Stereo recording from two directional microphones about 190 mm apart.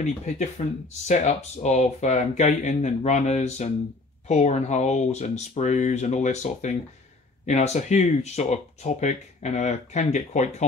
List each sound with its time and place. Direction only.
0.0 s speech: 40° left (ahead or behind)